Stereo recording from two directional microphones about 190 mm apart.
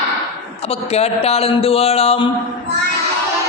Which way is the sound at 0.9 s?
30° left (ahead or behind).